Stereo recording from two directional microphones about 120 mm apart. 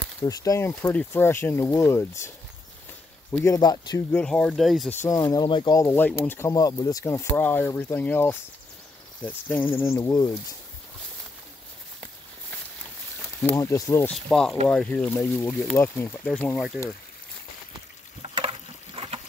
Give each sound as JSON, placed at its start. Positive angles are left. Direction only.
{"t": 0.2, "sound": "speech", "side_deg": 30}
{"t": 3.4, "sound": "speech", "side_deg": 35}
{"t": 4.1, "sound": "speech", "side_deg": 10}
{"t": 4.8, "sound": "speech", "side_deg": 20}
{"t": 5.8, "sound": "speech", "side_deg": 20}
{"t": 6.5, "sound": "speech", "side_deg": 30}
{"t": 13.5, "sound": "speech", "side_deg": 25}
{"t": 14.1, "sound": "speech", "side_deg": 5}
{"t": 16.3, "sound": "speech", "side_deg": 5}
{"t": 18.2, "sound": "a sound", "side_deg": -50}